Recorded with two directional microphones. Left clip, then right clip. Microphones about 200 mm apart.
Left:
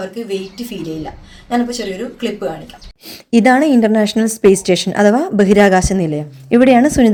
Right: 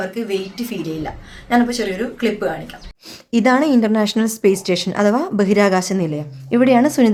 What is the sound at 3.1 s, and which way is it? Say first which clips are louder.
A woman's voice: left 4 dB; 15° left (ahead or behind).